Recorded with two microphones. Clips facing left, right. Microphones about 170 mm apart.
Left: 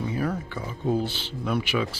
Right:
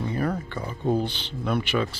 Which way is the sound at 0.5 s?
5° left (ahead or behind).